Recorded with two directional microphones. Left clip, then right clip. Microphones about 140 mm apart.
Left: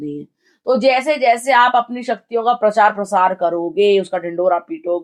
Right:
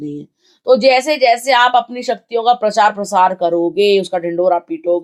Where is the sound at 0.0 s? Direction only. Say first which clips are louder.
Right 1 dB; 20° right (ahead or behind).